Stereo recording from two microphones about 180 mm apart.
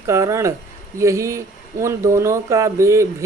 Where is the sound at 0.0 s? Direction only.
15° right (ahead or behind).